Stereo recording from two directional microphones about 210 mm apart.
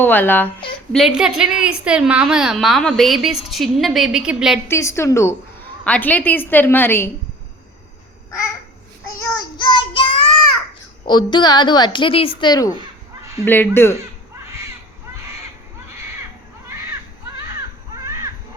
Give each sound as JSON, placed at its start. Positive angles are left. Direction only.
{"t": 0.0, "sound": "a woman's voice", "side_deg": 10}
{"t": 4.7, "sound": "a woman's voice", "side_deg": 15}
{"t": 9.1, "sound": "child singing", "side_deg": 20}
{"t": 11.1, "sound": "a woman's voice", "side_deg": 20}
{"t": 17.5, "sound": "baby cry", "side_deg": -15}